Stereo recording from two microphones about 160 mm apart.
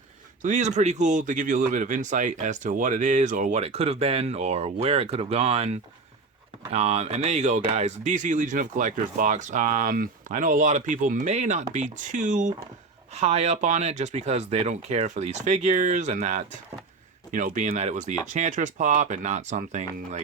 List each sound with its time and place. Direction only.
0.4 s speech: 50° right (ahead or behind)
3.6 s speech: 40° right (ahead or behind); by 12.5 s 55° right (ahead or behind)
13.1 s speech: 40° right (ahead or behind)